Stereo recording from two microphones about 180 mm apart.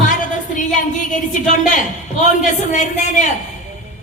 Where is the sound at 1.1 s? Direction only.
45° left (ahead or behind).